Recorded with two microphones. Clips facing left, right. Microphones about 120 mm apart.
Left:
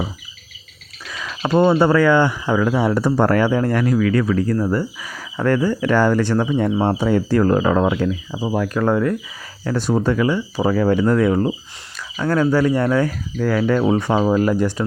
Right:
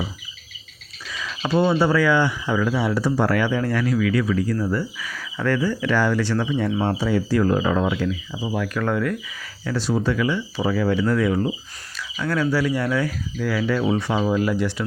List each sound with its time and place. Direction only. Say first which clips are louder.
1.0 s speech: left 3 dB; 55° left (ahead or behind); by 9.1 s 30° left (ahead or behind)
9.6 s speech: left 4 dB; 50° left (ahead or behind)